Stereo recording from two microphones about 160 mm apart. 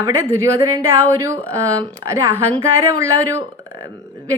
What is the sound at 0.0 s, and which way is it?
A woman's voice, 15° right (ahead or behind).